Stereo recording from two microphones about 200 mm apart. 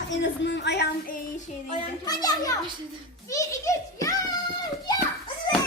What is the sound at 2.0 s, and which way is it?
Children playing, 20° left (ahead or behind).